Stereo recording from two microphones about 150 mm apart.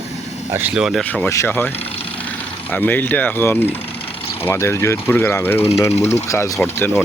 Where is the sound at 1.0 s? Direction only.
10° left (ahead or behind).